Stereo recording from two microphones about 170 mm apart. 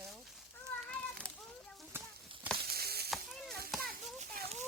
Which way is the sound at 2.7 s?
65° right (ahead or behind).